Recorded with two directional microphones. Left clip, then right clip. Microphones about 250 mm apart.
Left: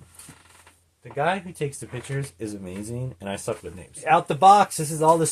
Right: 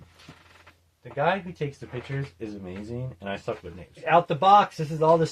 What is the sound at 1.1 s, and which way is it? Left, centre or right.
Speech, left.